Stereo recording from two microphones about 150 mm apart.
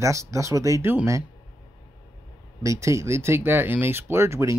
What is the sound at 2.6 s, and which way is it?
Speech, 20° right (ahead or behind).